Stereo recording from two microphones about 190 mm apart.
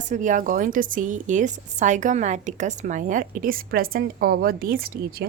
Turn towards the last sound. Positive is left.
turn(degrees=-50)  # may be behind; listen again after turning